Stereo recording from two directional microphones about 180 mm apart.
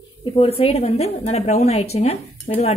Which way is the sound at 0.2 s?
30° left (ahead or behind).